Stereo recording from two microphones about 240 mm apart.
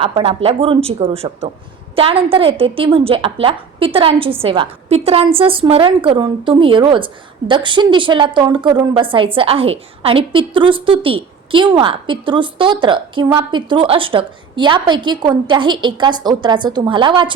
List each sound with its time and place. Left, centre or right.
0.0 s a woman's voice: right